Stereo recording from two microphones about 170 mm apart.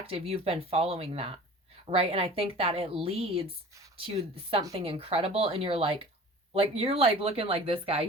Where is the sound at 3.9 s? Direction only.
35° right (ahead or behind).